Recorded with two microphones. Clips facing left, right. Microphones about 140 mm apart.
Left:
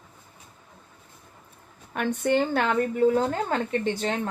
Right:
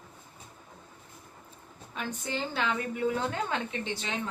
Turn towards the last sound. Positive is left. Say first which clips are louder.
# left 9 dB
turn(degrees=50)  # may be behind; listen again after turning